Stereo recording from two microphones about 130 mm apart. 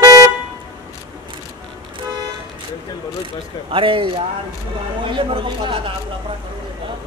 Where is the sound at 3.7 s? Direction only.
40° right (ahead or behind).